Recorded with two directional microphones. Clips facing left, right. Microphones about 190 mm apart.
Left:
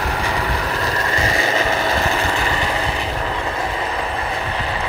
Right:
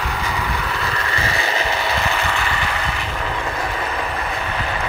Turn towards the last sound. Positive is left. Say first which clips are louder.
# left 1 dB
turn(degrees=25)  # may be behind; listen again after turning